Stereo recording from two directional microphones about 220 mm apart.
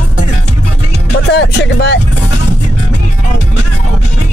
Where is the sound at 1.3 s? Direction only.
50° left (ahead or behind).